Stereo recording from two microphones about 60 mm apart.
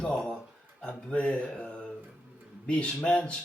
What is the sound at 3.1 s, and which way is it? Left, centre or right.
Speech, left.